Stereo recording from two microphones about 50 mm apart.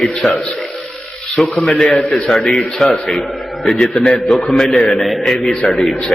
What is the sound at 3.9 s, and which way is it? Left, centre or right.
Speech, left.